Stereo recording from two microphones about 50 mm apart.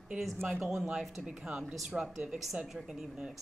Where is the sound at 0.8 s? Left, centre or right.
Centre.